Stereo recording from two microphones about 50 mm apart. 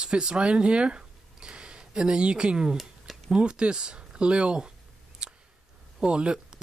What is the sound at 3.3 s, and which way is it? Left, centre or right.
Speech, centre.